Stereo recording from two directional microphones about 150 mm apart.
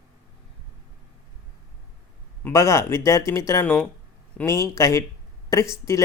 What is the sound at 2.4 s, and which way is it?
Speech, 20° left (ahead or behind).